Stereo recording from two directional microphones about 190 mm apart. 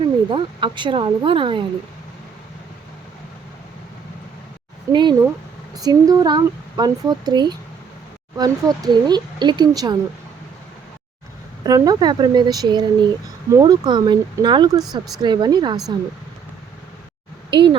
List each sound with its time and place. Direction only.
0.3 s speech: 25° right (ahead or behind)
4.9 s speech: 25° right (ahead or behind)
11.6 s speech: 20° right (ahead or behind)
17.5 s speech: 25° right (ahead or behind)